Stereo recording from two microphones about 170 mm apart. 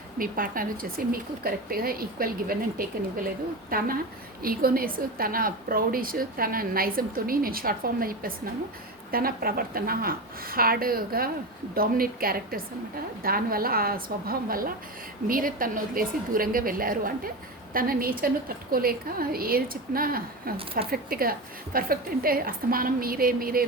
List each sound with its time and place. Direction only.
0.2 s a woman's voice: 55° right (ahead or behind)